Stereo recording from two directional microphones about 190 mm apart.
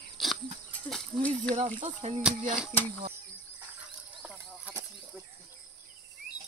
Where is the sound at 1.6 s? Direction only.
35° right (ahead or behind).